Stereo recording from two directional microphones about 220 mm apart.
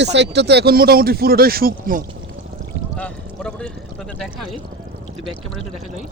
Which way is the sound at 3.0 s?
5° left (ahead or behind).